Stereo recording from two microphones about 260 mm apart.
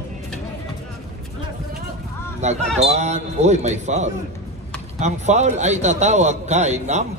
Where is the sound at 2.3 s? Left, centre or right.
Right.